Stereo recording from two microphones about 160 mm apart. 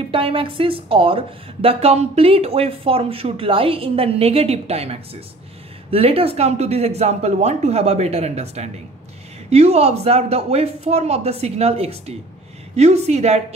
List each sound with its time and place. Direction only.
0.1 s speech: 35° right (ahead or behind)